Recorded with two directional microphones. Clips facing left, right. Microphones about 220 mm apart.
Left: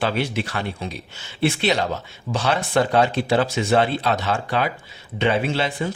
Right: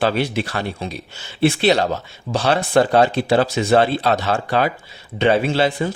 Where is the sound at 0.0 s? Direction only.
40° right (ahead or behind).